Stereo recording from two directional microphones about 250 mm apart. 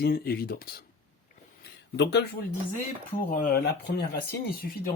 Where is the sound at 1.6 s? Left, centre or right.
Left.